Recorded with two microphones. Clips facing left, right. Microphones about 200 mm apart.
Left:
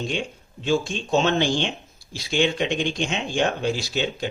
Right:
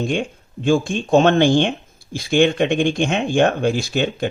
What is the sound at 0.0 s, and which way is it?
Speech, 55° right (ahead or behind).